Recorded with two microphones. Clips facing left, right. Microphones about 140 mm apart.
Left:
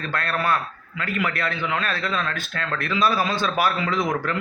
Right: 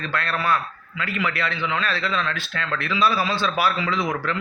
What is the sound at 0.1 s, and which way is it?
A man's voice, 45° left (ahead or behind).